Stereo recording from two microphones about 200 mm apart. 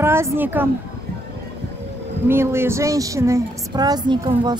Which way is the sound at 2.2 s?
10° right (ahead or behind).